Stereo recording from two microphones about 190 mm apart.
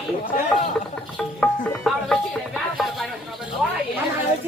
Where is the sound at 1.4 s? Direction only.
5° left (ahead or behind).